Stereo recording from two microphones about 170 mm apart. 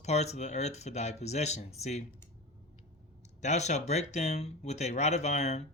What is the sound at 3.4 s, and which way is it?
Speech, 45° left (ahead or behind).